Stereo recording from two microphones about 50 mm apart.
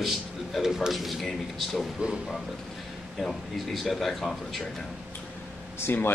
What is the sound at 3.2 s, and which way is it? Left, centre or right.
A man's voice, centre.